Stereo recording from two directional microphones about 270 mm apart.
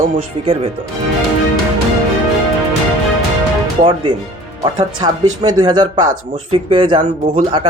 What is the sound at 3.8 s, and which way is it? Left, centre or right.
Speech, centre.